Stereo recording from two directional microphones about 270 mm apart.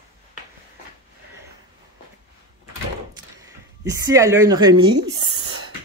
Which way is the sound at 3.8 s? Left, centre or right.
Centre.